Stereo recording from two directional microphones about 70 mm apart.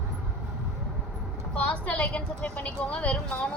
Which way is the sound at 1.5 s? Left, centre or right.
Centre.